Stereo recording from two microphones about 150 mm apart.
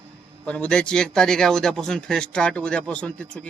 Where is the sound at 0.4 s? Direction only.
5° left (ahead or behind).